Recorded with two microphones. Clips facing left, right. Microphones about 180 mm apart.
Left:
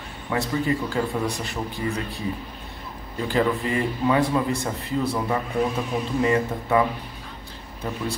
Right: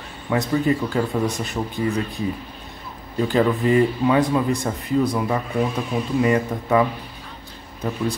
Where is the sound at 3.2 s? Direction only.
20° right (ahead or behind).